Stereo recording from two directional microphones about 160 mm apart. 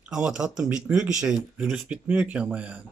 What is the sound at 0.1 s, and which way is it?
Speech, 5° right (ahead or behind).